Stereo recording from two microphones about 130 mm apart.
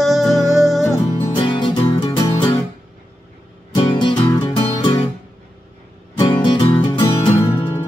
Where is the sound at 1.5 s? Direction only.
35° left (ahead or behind).